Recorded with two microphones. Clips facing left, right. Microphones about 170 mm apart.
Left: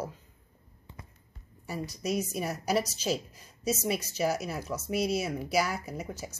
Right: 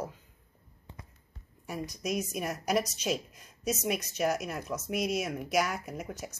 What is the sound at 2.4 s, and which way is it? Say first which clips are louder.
Speech: right 1 dB; 5° left (ahead or behind).